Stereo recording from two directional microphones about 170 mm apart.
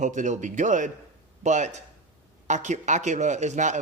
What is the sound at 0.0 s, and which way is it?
Speech, 45° right (ahead or behind).